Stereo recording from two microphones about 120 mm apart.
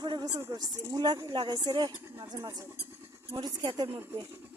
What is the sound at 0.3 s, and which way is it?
A woman's voice, 30° right (ahead or behind).